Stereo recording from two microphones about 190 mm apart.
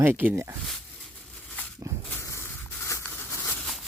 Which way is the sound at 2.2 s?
15° left (ahead or behind).